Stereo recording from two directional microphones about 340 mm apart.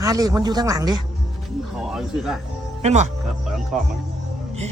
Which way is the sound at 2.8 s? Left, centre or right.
Centre.